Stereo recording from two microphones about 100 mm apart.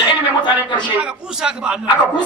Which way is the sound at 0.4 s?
50° left (ahead or behind).